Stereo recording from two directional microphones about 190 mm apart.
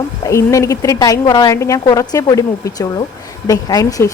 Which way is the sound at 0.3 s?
15° left (ahead or behind).